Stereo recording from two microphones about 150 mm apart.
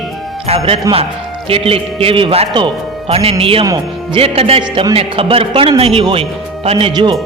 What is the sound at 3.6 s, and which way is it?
Speech, 30° right (ahead or behind).